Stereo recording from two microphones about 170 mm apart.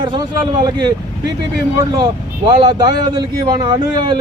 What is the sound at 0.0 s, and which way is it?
Speech, 25° right (ahead or behind).